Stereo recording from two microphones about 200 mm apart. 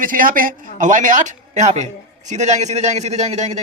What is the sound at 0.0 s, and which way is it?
A man's voice, 45° right (ahead or behind).